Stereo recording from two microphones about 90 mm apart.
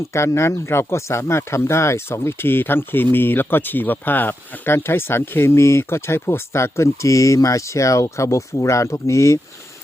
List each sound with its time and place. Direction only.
0.1 s speech: 30° left (ahead or behind)